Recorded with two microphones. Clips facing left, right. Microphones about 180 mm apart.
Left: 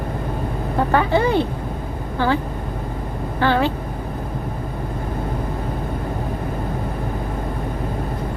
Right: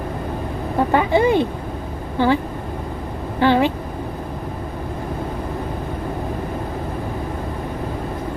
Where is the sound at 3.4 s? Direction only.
15° right (ahead or behind).